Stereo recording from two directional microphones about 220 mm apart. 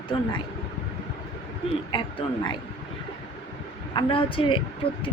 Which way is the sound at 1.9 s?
20° left (ahead or behind).